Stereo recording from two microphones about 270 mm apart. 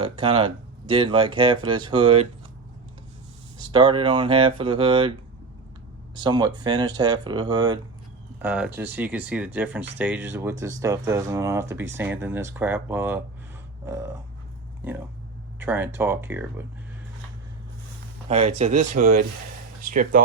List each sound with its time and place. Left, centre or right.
0.0 s speech: centre
3.6 s speech: centre
6.1 s speech: centre
8.4 s speech: centre
18.3 s speech: right